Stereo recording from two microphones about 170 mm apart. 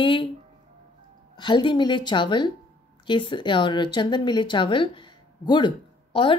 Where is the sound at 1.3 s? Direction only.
25° left (ahead or behind).